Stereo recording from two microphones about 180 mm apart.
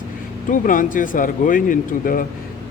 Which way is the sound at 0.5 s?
45° left (ahead or behind).